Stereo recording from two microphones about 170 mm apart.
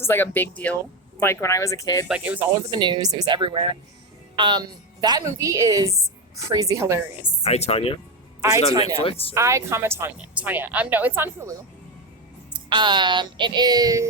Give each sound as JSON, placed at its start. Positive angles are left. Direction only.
{"t": 0.0, "sound": "speech", "side_deg": 15}
{"t": 2.0, "sound": "a woman's voice", "side_deg": -10}
{"t": 2.5, "sound": "a woman's voice", "side_deg": -25}
{"t": 7.4, "sound": "speech", "side_deg": 35}
{"t": 8.4, "sound": "a man's voice", "side_deg": -15}
{"t": 9.0, "sound": "speech", "side_deg": 35}
{"t": 9.3, "sound": "a woman's voice", "side_deg": -15}
{"t": 12.6, "sound": "a woman's voice", "side_deg": -30}